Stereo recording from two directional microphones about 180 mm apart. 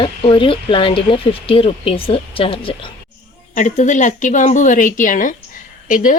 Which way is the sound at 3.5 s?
40° left (ahead or behind).